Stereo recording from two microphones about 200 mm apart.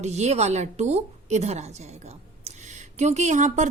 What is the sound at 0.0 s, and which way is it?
Speech, 35° right (ahead or behind).